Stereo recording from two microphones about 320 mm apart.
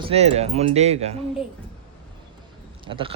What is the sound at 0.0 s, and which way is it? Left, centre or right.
Speech, centre.